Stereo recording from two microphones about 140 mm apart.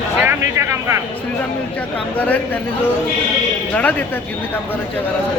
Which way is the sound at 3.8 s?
10° left (ahead or behind).